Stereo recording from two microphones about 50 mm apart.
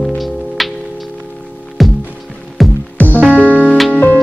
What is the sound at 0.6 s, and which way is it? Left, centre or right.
Music, centre.